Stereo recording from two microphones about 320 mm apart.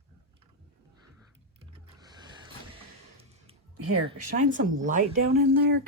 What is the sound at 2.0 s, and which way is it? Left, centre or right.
Printer, centre.